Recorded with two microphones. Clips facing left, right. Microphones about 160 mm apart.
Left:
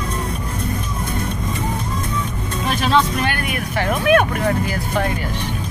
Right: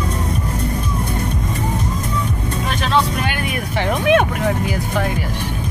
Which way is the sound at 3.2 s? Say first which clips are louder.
Even; 15° right (ahead or behind).